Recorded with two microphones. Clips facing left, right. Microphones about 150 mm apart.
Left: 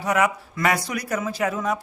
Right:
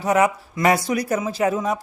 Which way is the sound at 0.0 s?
30° right (ahead or behind).